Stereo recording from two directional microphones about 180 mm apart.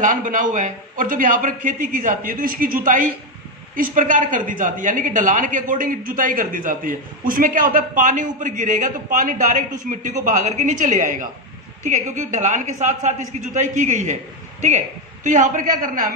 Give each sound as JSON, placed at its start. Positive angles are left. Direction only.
{"t": 0.0, "sound": "a woman's voice", "side_deg": -45}
{"t": 15.2, "sound": "a woman's voice", "side_deg": -45}